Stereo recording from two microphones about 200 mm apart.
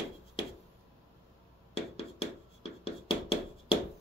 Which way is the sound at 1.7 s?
30° left (ahead or behind).